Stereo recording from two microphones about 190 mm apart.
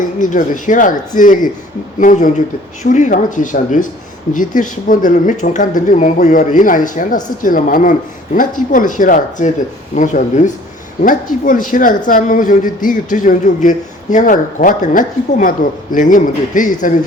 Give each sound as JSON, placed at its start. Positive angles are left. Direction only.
{"t": 0.2, "sound": "speech", "side_deg": 45}